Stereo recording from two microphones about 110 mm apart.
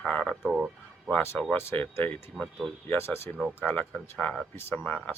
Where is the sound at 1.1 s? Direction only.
20° left (ahead or behind).